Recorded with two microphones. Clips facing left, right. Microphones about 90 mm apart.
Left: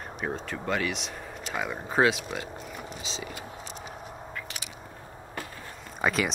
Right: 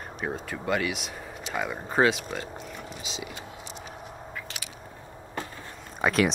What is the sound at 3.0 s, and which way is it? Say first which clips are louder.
Speech: even; 35° left (ahead or behind).